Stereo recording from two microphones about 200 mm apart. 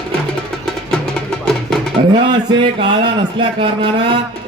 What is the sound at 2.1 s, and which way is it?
A man's voice, 25° right (ahead or behind).